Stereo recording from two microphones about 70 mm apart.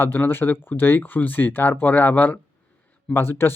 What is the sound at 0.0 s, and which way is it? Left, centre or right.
Speech, left.